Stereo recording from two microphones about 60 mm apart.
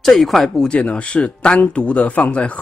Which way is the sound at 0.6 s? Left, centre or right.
Centre.